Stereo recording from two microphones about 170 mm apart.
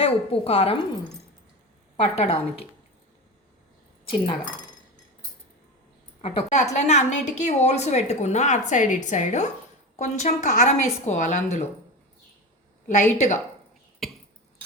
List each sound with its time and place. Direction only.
0.0 s a woman's voice: 35° left (ahead or behind)
2.0 s a woman's voice: 40° left (ahead or behind)
6.2 s a woman's voice: 45° left (ahead or behind)
12.9 s a woman's voice: 45° left (ahead or behind)
14.0 s a sound: centre (ahead or behind)